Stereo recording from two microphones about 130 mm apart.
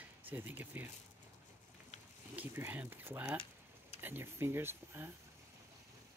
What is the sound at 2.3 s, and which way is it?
Speech, 15° right (ahead or behind).